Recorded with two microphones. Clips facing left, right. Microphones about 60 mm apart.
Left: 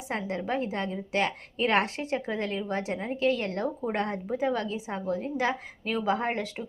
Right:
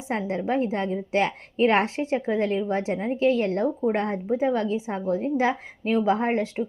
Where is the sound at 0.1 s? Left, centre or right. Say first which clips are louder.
Right 5 dB; centre.